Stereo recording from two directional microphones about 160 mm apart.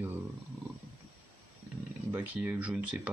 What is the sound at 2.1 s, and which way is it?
Speech, 10° right (ahead or behind).